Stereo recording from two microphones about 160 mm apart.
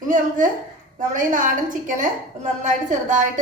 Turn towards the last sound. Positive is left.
turn(degrees=-50)  # may be behind; listen again after turning